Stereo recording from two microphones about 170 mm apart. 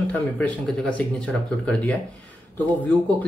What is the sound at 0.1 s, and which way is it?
Speech, 5° left (ahead or behind).